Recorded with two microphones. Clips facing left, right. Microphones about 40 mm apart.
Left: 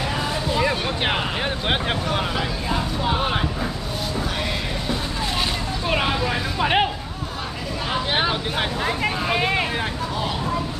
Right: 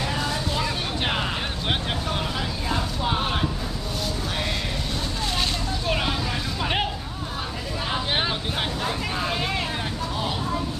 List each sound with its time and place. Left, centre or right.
0.1 s vehicle: centre
3.0 s vehicle: centre
5.9 s vehicle: centre
7.9 s vehicle: centre
8.8 s vehicle: left